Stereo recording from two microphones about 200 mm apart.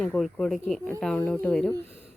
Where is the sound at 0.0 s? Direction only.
5° left (ahead or behind).